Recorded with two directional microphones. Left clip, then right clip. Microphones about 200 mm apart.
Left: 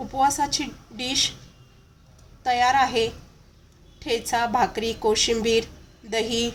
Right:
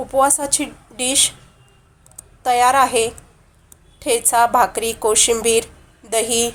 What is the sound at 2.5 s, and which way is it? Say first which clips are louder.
Speech: right 6 dB; 15° right (ahead or behind).